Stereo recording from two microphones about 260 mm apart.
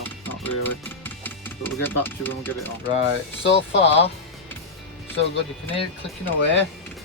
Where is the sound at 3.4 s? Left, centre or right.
Left.